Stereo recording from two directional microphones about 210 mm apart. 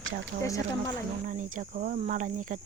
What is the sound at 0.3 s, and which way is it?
Speech, 40° right (ahead or behind).